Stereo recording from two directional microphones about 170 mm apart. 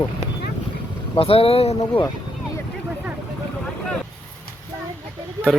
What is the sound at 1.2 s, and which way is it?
Speech, 35° left (ahead or behind).